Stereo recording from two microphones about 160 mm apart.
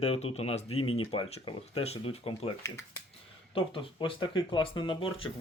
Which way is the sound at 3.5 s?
35° left (ahead or behind).